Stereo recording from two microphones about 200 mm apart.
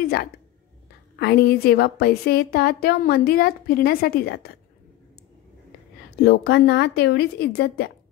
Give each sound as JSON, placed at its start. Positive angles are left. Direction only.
{"t": 0.0, "sound": "a woman's voice", "side_deg": 50}
{"t": 6.1, "sound": "a woman's voice", "side_deg": 55}